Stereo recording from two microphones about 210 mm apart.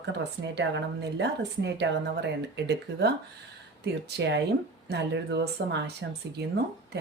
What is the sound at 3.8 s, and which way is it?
A woman's voice, 55° right (ahead or behind).